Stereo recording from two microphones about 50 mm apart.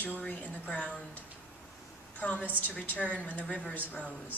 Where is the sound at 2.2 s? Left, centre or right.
Left.